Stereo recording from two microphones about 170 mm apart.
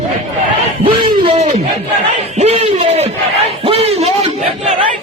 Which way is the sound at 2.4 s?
35° right (ahead or behind).